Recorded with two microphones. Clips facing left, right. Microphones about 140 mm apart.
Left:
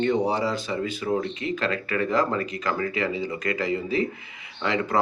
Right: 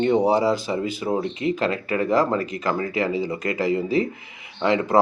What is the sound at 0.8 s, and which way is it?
Speech, 25° right (ahead or behind).